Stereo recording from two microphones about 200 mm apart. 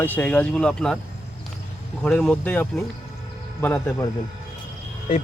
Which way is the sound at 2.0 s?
5° left (ahead or behind).